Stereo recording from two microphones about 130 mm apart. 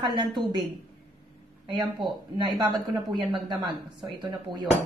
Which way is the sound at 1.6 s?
35° right (ahead or behind).